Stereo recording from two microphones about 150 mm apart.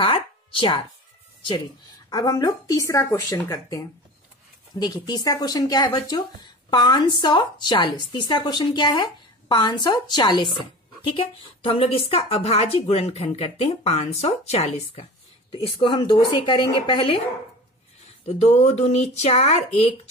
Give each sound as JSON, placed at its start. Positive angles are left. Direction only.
{"t": 0.0, "sound": "speech", "side_deg": 35}
{"t": 2.0, "sound": "a woman's voice", "side_deg": 25}
{"t": 15.5, "sound": "a woman's voice", "side_deg": 35}
{"t": 18.2, "sound": "speech", "side_deg": 45}